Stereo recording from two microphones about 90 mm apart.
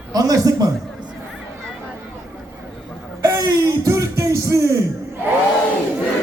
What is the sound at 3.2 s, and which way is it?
Music, 40° right (ahead or behind).